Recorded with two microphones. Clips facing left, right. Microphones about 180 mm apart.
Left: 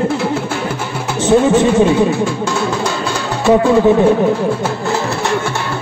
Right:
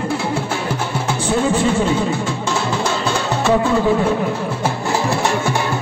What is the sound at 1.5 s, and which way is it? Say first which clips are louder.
Speech: left 6 dB; 20° left (ahead or behind).